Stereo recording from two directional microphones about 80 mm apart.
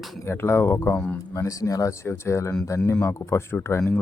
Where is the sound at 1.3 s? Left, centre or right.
Left.